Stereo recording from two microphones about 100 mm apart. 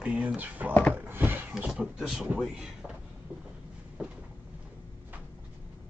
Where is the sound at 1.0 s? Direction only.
20° right (ahead or behind).